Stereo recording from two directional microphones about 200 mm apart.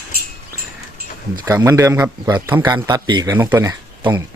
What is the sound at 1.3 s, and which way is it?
Speech, 15° right (ahead or behind).